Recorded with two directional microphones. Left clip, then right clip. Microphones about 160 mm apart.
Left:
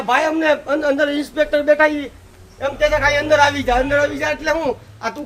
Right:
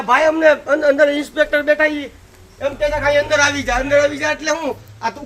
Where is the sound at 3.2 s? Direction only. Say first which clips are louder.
Left 1 dB; 40° left (ahead or behind).